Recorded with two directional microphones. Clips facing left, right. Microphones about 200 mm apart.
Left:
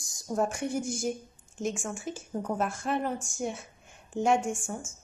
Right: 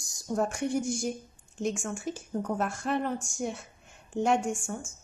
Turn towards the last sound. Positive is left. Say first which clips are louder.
# right 1 dB
turn(degrees=0)  # may be behind; listen again after turning